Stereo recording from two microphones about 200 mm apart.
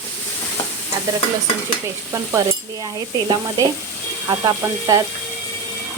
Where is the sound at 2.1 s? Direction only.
15° right (ahead or behind).